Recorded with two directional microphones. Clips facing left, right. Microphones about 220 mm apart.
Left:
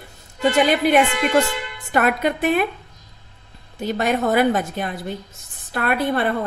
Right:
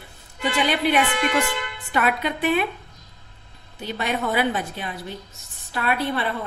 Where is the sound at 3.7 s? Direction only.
45° left (ahead or behind).